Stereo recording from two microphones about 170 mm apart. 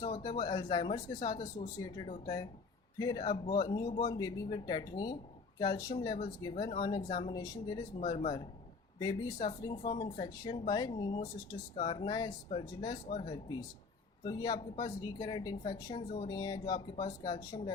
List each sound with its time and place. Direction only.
0.0 s speech: 25° left (ahead or behind)
9.0 s speech: 25° left (ahead or behind)
14.3 s speech: 25° left (ahead or behind)